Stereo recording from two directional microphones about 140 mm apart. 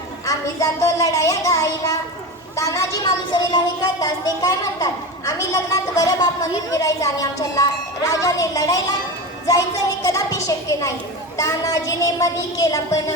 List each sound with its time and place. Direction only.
0.3 s a woman's voice: 25° left (ahead or behind)